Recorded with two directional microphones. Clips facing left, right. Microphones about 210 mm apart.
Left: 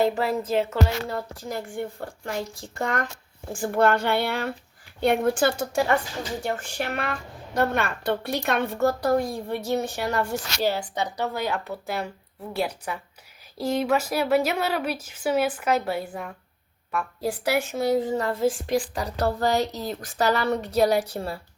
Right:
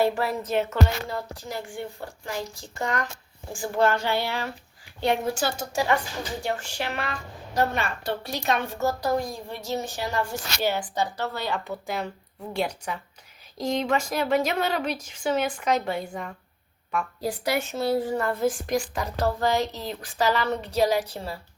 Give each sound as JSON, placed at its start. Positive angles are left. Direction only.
{"t": 0.0, "sound": "a woman's voice", "side_deg": 25}
{"t": 1.5, "sound": "a woman's voice", "side_deg": 50}
{"t": 10.6, "sound": "a woman's voice", "side_deg": 35}
{"t": 11.0, "sound": "a woman's voice", "side_deg": 15}